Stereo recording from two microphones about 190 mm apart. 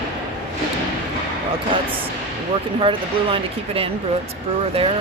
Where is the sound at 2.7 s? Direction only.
30° right (ahead or behind).